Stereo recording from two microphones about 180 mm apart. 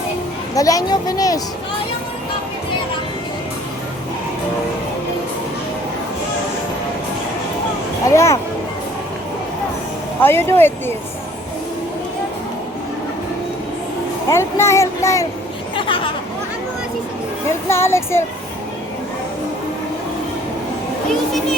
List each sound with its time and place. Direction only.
0.5 s a woman's voice: 20° left (ahead or behind)
8.0 s speech: 15° left (ahead or behind)
10.2 s speech: 15° left (ahead or behind)
14.3 s speech: 15° left (ahead or behind)
17.7 s speech: 15° left (ahead or behind)